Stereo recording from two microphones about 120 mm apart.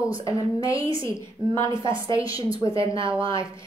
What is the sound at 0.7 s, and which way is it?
Speech, 45° right (ahead or behind).